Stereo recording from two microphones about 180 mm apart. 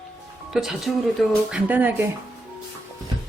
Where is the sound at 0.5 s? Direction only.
Centre (ahead or behind).